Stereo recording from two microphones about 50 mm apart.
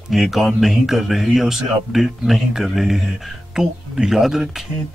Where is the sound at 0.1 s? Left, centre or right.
Centre.